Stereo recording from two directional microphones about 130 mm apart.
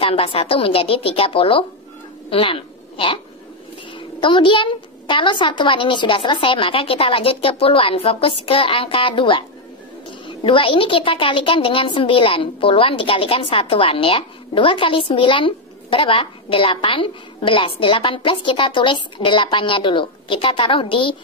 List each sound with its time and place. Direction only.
0.0 s a woman's voice: 45° left (ahead or behind)
2.2 s a sound: 45° left (ahead or behind)
4.2 s a woman's voice: 40° left (ahead or behind)